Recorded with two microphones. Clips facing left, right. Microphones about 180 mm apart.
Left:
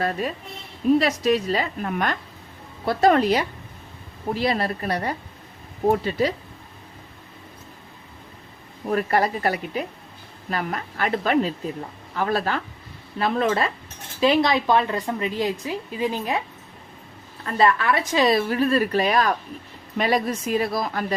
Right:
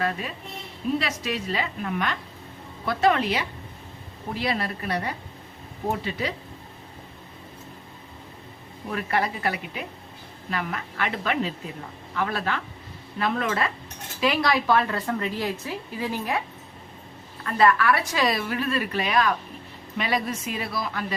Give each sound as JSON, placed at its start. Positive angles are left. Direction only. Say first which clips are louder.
{"t": 0.0, "sound": "a woman's voice", "louder": "left 3 dB", "side_deg": 40}
{"t": 8.9, "sound": "a woman's voice", "louder": "left 5 dB", "side_deg": 40}
{"t": 17.4, "sound": "a woman's voice", "louder": "even", "side_deg": 25}